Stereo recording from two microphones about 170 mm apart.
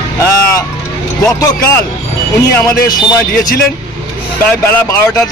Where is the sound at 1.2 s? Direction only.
20° left (ahead or behind).